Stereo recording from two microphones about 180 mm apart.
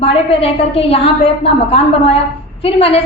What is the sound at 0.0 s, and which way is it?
A woman's voice, 35° left (ahead or behind).